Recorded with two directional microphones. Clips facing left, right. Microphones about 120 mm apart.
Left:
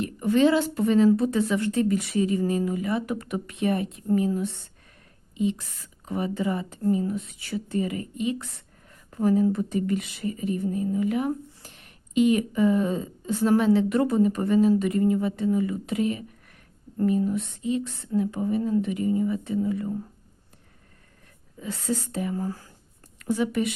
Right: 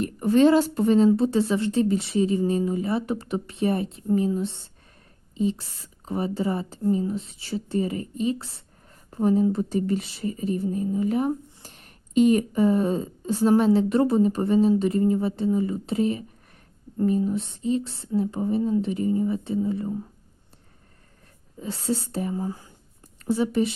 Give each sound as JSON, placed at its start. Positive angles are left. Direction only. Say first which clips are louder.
{"t": 0.0, "sound": "a woman's voice", "louder": "right 2 dB", "side_deg": -40}
{"t": 17.2, "sound": "a woman's voice", "louder": "right 1 dB", "side_deg": -30}
{"t": 21.6, "sound": "speech", "louder": "right 2 dB", "side_deg": -30}
{"t": 22.4, "sound": "speech", "louder": "right 1 dB", "side_deg": -15}
{"t": 23.1, "sound": "a woman's voice", "louder": "right 2 dB", "side_deg": -30}